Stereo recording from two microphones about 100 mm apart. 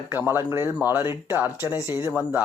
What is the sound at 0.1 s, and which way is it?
Speech, 20° right (ahead or behind).